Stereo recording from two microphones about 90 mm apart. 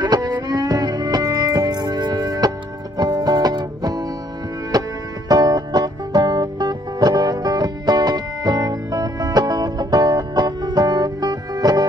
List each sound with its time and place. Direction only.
0.0 s music: 50° right (ahead or behind)